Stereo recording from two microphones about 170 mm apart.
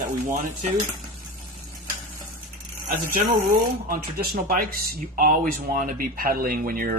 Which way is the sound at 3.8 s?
55° right (ahead or behind).